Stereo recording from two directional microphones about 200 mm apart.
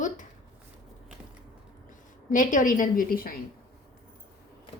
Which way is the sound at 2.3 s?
40° left (ahead or behind).